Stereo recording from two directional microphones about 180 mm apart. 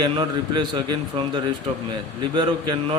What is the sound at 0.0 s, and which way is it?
A man's voice, 25° right (ahead or behind).